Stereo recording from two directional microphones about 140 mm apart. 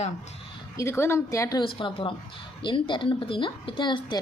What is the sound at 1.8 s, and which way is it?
A woman's voice, 40° left (ahead or behind).